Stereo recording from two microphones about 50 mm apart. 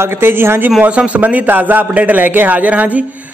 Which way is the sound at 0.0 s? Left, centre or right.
Right.